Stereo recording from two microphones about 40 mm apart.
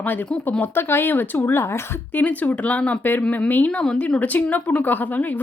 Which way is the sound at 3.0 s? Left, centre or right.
Left.